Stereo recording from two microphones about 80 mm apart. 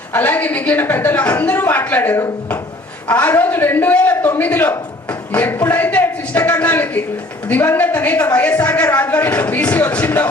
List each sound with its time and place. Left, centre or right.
0.1 s speech: left